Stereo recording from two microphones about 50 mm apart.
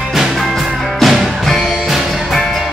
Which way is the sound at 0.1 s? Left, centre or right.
Centre.